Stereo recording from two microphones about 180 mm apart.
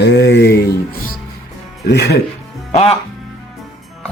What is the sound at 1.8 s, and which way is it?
Speech, 65° left (ahead or behind).